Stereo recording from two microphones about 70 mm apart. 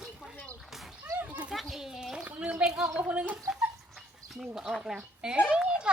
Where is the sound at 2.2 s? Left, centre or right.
Centre.